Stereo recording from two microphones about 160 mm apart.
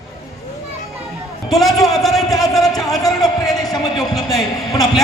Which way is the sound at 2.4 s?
Centre (ahead or behind).